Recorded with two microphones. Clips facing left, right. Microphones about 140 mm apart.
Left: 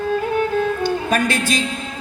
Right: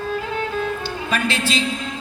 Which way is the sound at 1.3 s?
45° left (ahead or behind).